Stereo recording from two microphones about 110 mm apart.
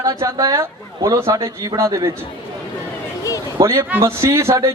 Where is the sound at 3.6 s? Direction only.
30° right (ahead or behind).